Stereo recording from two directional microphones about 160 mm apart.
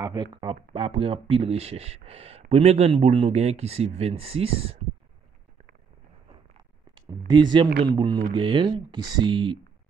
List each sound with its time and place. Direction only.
0.0 s speech: 25° right (ahead or behind)
7.1 s speech: 25° right (ahead or behind)